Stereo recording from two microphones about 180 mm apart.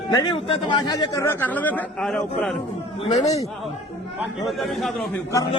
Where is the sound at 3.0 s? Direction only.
35° left (ahead or behind).